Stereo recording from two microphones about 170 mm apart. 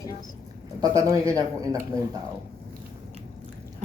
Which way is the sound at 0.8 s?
20° right (ahead or behind).